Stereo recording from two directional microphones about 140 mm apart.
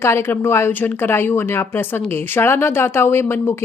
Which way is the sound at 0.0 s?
20° left (ahead or behind).